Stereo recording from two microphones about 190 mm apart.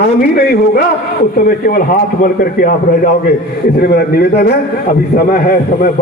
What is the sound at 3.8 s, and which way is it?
A man's voice, 55° left (ahead or behind).